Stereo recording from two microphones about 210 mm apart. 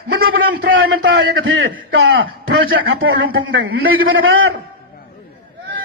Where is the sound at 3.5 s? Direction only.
70° right (ahead or behind).